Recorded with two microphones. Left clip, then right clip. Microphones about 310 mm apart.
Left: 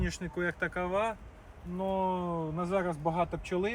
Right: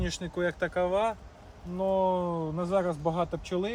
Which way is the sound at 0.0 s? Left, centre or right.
Right.